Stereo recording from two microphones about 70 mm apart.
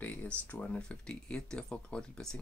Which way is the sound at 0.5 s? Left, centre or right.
Centre.